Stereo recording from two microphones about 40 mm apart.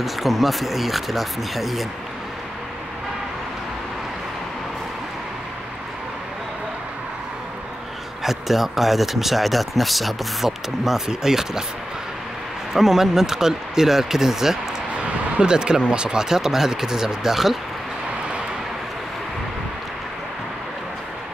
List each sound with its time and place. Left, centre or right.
0.0 s speech: centre
8.2 s speech: centre
12.7 s speech: centre
15.0 s a sound: right
15.9 s speech: right